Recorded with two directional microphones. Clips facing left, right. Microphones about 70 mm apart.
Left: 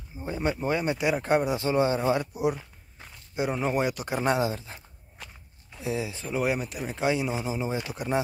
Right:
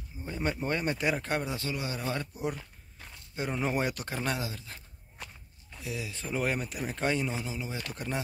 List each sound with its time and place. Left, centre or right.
0.4 s speech: centre
1.2 s speech: left
2.1 s speech: centre
2.6 s a sound: centre
4.1 s speech: left
5.8 s speech: left
6.2 s speech: centre
7.4 s speech: left
7.8 s speech: centre